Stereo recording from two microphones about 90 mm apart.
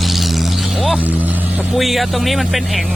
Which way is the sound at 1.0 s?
20° right (ahead or behind).